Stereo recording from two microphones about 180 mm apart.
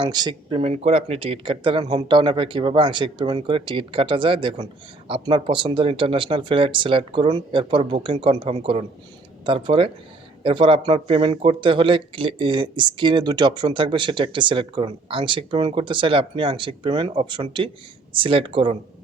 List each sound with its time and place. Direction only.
0.0 s speech: 25° right (ahead or behind)